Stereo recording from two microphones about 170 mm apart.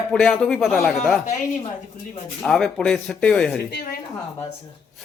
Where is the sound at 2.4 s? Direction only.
5° left (ahead or behind).